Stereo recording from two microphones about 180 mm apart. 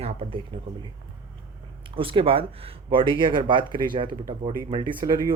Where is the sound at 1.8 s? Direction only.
30° right (ahead or behind).